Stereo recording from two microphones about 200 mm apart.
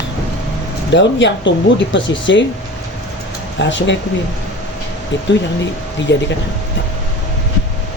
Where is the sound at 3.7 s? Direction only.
65° left (ahead or behind).